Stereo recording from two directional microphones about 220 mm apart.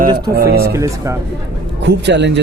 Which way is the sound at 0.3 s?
45° right (ahead or behind).